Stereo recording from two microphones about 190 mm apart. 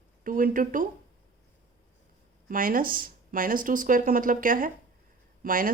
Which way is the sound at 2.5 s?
45° right (ahead or behind).